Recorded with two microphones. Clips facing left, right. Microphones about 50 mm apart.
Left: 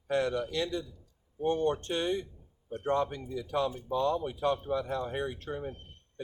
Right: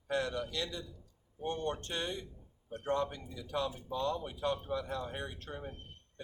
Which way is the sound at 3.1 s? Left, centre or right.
Left.